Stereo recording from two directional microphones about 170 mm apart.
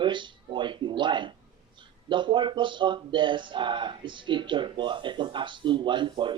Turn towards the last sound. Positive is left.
turn(degrees=-30)  # may be behind; listen again after turning